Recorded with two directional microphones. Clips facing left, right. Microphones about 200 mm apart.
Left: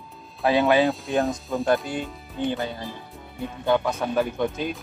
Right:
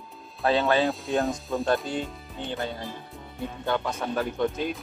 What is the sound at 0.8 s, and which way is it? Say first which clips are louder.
Speech: left 2 dB; centre (ahead or behind).